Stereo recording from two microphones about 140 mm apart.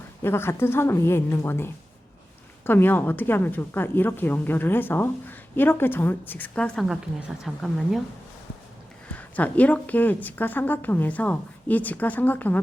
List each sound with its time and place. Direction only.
0.2 s a woman's voice: 15° left (ahead or behind); by 8.0 s centre (ahead or behind)
9.0 s a woman's voice: 10° left (ahead or behind)